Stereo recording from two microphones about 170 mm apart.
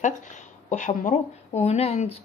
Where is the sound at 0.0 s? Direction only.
45° left (ahead or behind).